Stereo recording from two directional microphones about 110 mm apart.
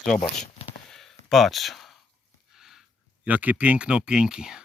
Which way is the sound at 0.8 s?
5° left (ahead or behind).